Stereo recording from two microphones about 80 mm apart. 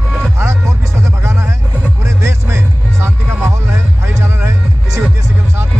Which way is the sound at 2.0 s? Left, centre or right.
Right.